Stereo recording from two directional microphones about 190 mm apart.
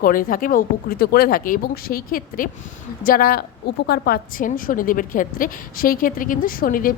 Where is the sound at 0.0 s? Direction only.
45° left (ahead or behind).